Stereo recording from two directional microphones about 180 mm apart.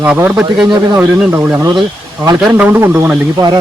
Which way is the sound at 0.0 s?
10° right (ahead or behind).